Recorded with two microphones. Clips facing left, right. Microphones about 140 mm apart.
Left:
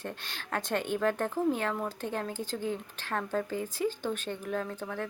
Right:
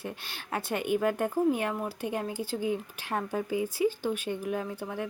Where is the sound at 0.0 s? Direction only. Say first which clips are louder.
Right 1 dB; 10° right (ahead or behind).